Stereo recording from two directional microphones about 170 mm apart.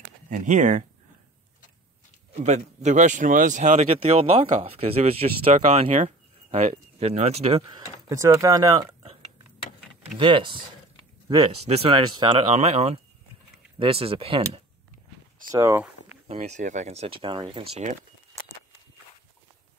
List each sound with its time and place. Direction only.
0.3 s speech: 50° right (ahead or behind)
2.4 s speech: 45° right (ahead or behind); by 8.7 s 20° right (ahead or behind)
10.1 s speech: 30° right (ahead or behind)
11.5 s speech: 40° right (ahead or behind)
15.5 s speech: 20° right (ahead or behind)
16.3 s speech: 40° right (ahead or behind)